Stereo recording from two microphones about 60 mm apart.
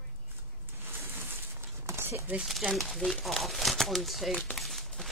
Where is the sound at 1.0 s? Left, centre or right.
Right.